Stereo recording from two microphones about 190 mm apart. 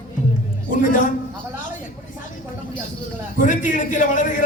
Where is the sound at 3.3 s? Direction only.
40° left (ahead or behind).